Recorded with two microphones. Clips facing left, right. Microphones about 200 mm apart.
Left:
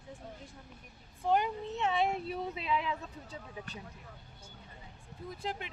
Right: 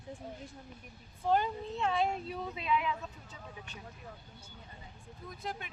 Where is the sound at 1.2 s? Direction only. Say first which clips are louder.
Even; 15° left (ahead or behind); by 3.7 s 30° left (ahead or behind).